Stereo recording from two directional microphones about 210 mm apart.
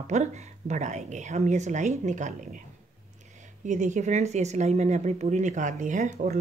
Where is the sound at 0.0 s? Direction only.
35° right (ahead or behind).